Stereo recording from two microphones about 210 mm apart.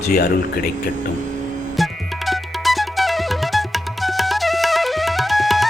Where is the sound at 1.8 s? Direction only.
Centre (ahead or behind).